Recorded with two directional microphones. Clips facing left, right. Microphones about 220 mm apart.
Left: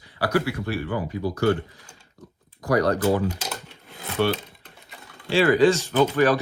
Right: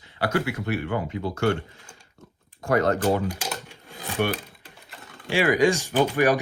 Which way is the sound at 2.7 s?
25° right (ahead or behind).